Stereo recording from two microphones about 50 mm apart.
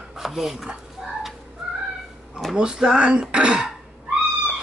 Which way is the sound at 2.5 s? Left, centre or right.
Centre.